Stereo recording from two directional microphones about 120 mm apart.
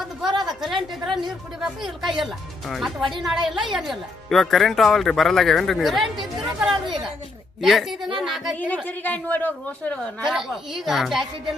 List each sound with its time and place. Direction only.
0.4 s a woman's voice: centre (ahead or behind)
8.5 s a woman's voice: 15° left (ahead or behind)
10.2 s speech: centre (ahead or behind)